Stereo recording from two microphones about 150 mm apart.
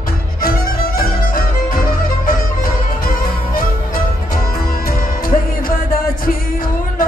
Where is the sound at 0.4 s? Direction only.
80° left.